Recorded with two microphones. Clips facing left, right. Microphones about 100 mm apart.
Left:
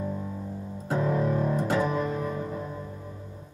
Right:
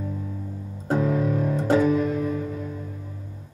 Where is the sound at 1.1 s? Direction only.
35° left (ahead or behind).